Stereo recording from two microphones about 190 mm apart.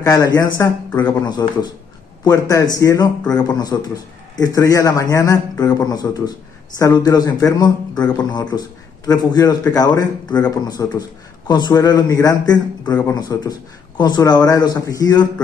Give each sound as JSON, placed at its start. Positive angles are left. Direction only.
{"t": 0.0, "sound": "a man's voice", "side_deg": 20}